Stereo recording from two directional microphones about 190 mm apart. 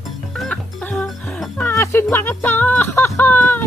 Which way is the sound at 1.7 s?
15° left (ahead or behind).